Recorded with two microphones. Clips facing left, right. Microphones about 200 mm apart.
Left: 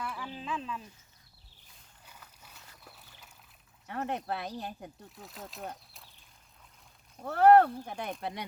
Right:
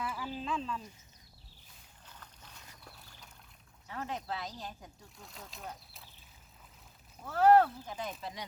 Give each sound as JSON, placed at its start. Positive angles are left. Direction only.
{"t": 0.0, "sound": "speech", "side_deg": -5}
{"t": 2.0, "sound": "boat", "side_deg": 10}
{"t": 3.8, "sound": "speech", "side_deg": 60}
{"t": 5.1, "sound": "speech", "side_deg": 0}
{"t": 7.3, "sound": "speech", "side_deg": 60}